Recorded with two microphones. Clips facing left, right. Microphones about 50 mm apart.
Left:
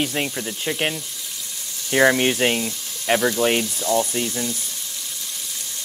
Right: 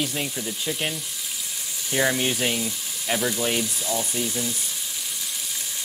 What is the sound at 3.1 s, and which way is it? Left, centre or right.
Speech, left.